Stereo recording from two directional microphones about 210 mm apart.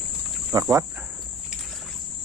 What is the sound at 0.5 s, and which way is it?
Insect, 15° right (ahead or behind).